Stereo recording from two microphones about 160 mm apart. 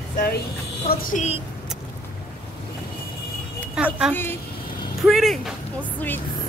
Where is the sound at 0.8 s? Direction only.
65° left (ahead or behind).